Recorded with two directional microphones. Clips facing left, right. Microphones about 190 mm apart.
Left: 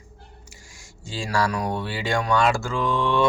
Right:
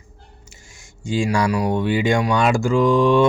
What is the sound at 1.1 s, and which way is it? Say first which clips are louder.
Speech: right 6 dB; 15° right (ahead or behind).